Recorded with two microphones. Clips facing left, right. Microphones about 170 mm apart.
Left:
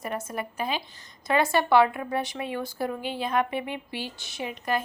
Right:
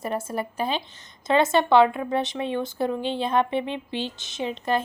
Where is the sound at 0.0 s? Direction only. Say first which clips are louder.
Right 4 dB; 30° right (ahead or behind).